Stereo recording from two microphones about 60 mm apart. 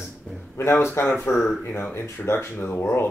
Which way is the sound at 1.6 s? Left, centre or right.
Left.